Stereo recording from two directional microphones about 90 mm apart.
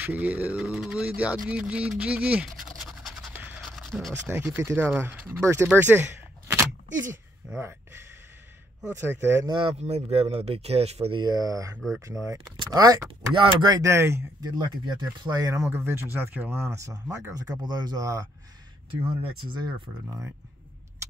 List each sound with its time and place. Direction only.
0.0 s speech: 15° right (ahead or behind)
2.8 s scratch: centre (ahead or behind)
4.3 s speech: 25° right (ahead or behind)
5.7 s a sound: 20° right (ahead or behind)
8.9 s speech: 25° right (ahead or behind)
9.5 s speech: 80° right
11.2 s speech: 45° right (ahead or behind)
12.5 s speech: 50° right (ahead or behind)
13.3 s speech: 65° right (ahead or behind)
13.8 s speech: 30° right (ahead or behind)
14.4 s speech: 55° right (ahead or behind); by 17.0 s 35° right (ahead or behind)
17.6 s speech: 50° right (ahead or behind)
18.9 s speech: 80° right